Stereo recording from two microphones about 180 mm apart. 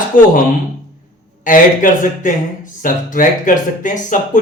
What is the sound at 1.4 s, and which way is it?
Speech, 45° left (ahead or behind).